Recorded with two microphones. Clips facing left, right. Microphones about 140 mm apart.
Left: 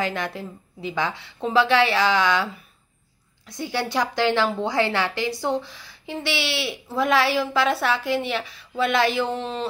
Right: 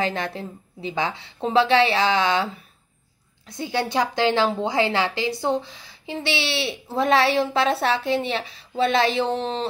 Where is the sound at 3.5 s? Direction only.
20° right (ahead or behind).